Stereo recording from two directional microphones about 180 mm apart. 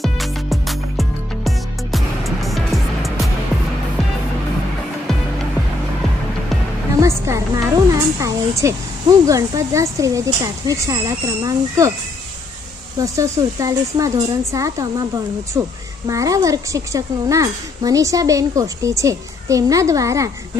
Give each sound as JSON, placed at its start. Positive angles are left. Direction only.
{"t": 0.0, "sound": "music", "side_deg": 0}
{"t": 7.0, "sound": "speech", "side_deg": -15}
{"t": 13.0, "sound": "speech", "side_deg": -20}